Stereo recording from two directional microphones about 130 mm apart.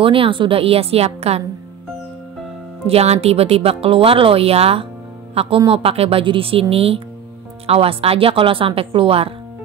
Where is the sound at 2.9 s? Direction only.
50° right (ahead or behind).